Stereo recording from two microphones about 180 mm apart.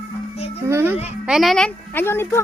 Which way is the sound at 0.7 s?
15° right (ahead or behind).